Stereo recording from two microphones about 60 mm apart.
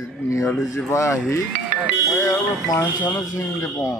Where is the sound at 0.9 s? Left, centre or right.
Left.